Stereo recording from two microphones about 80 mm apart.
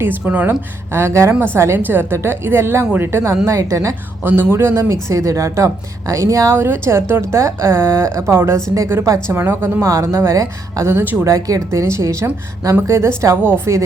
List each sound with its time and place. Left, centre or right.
0.0 s speech: right
0.9 s speech: right
4.2 s speech: right
6.6 s speech: right
11.2 s speech: right